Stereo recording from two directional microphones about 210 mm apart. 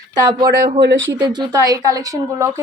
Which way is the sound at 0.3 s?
20° right (ahead or behind).